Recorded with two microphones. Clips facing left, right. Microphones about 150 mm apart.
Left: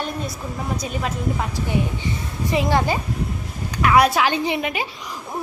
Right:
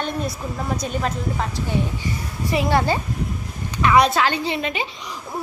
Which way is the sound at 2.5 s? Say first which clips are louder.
Even; 20° left (ahead or behind).